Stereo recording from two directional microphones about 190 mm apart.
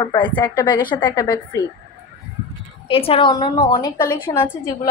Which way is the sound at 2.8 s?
30° left (ahead or behind).